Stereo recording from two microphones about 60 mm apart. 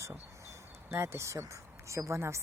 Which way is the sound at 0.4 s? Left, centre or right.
Right.